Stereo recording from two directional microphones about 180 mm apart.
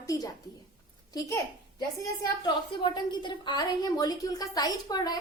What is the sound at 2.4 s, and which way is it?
A woman's voice, 25° left (ahead or behind).